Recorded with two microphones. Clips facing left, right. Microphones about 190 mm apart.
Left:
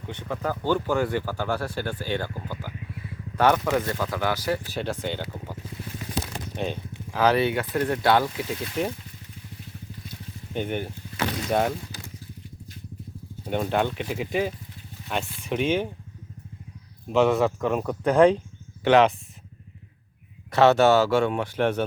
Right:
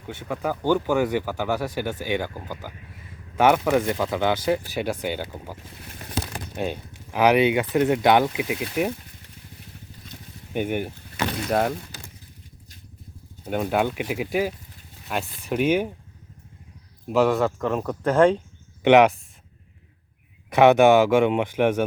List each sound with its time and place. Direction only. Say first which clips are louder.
0.1 s speech: right 2 dB; 10° right (ahead or behind)
6.6 s speech: right 2 dB; 10° right (ahead or behind)
10.5 s speech: right 3 dB; 10° right (ahead or behind)
11.4 s speech: right 1 dB; centre (ahead or behind)
13.4 s speech: right 1 dB; 5° right (ahead or behind)
17.1 s speech: even; centre (ahead or behind)
18.9 s speech: right 3 dB; 15° right (ahead or behind)
20.5 s speech: right 3 dB; 15° right (ahead or behind)